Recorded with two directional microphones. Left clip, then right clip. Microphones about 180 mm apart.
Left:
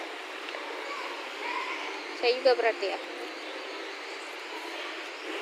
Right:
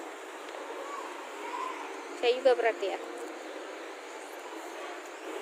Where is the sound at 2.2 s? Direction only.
15° right (ahead or behind).